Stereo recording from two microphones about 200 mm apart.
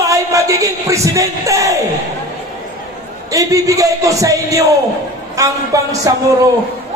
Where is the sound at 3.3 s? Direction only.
15° right (ahead or behind).